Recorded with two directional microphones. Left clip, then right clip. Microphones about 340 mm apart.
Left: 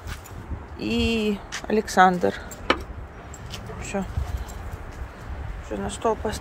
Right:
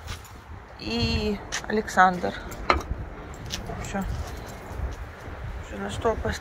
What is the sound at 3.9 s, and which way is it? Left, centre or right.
Speech, left.